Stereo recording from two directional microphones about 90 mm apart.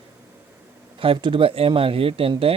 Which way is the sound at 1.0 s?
75° right (ahead or behind).